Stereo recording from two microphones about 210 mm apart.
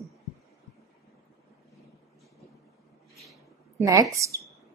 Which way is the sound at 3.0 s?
Centre (ahead or behind).